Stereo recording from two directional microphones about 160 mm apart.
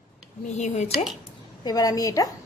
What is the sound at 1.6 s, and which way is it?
Speech, 25° left (ahead or behind).